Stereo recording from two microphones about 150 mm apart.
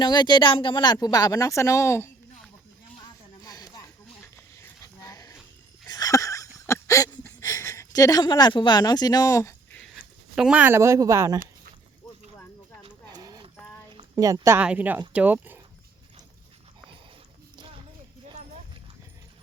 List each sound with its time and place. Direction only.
0.0 s speech: 30° left (ahead or behind)
3.3 s a sound: 25° left (ahead or behind)
5.9 s wheeze: 25° left (ahead or behind)
6.7 s a sound: 20° left (ahead or behind)
9.8 s speech: centre (ahead or behind); by 11.3 s 20° right (ahead or behind)
12.8 s horse: 30° right (ahead or behind)
14.2 s speech: 25° right (ahead or behind)